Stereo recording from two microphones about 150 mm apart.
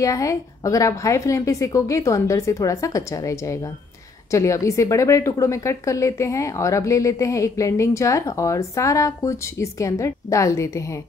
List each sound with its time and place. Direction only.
0.0 s a woman's voice: 20° left (ahead or behind)